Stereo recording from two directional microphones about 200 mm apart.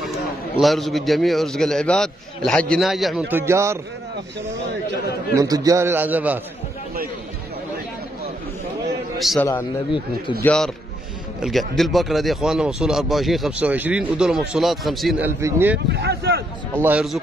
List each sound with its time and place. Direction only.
0.1 s a man's voice: centre (ahead or behind)
5.3 s a man's voice: 15° right (ahead or behind)
9.2 s speech: centre (ahead or behind)
15.9 s speech: 55° right (ahead or behind)
16.7 s a man's voice: 10° right (ahead or behind)